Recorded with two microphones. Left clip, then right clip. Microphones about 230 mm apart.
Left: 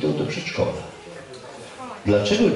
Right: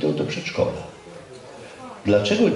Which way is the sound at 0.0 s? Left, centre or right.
Centre.